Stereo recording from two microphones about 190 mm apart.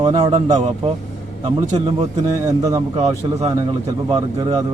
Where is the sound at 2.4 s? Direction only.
20° right (ahead or behind).